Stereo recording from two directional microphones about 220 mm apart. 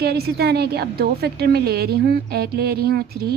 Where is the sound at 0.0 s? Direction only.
45° right (ahead or behind).